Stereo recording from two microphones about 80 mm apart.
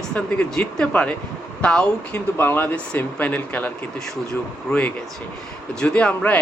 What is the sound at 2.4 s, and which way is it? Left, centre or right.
Speech, left.